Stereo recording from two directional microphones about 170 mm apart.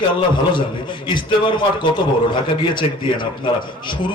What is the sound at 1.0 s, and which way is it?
Speech, 30° left (ahead or behind).